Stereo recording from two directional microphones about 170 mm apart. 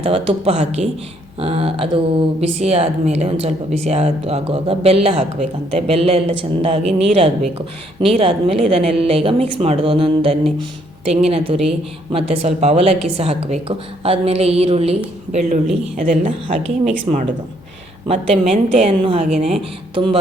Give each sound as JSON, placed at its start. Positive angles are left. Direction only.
{"t": 0.0, "sound": "speech", "side_deg": -35}